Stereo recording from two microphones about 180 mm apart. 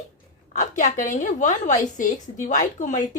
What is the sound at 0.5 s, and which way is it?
A woman's voice, 45° left (ahead or behind).